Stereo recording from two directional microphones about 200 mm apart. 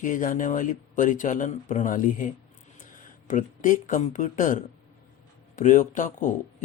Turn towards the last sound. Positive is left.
turn(degrees=40)  # may be behind; listen again after turning